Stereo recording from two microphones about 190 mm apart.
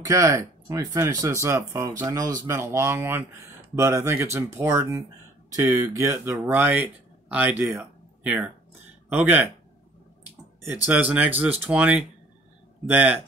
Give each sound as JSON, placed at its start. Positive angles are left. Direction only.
{"t": 0.0, "sound": "speech", "side_deg": -15}
{"t": 10.9, "sound": "speech", "side_deg": -10}